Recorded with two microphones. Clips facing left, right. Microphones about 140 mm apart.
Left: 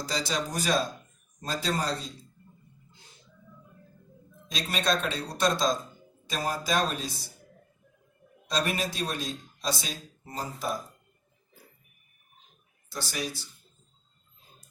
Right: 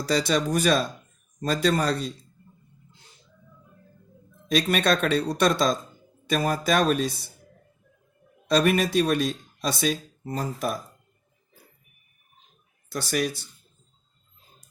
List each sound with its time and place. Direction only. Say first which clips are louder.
0.0 s speech: right 7 dB; 60° right (ahead or behind)
4.4 s speech: right 7 dB; 65° right (ahead or behind)
8.4 s speech: right 8 dB; 60° right (ahead or behind)
12.9 s speech: right 8 dB; 60° right (ahead or behind)